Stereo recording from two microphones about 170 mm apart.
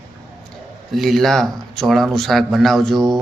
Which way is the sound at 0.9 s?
Centre (ahead or behind).